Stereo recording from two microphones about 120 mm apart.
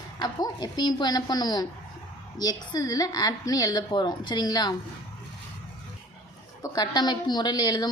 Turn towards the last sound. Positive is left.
turn(degrees=35)  # may be behind; listen again after turning